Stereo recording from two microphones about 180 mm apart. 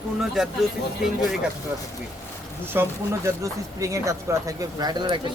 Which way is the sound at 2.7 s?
10° right (ahead or behind).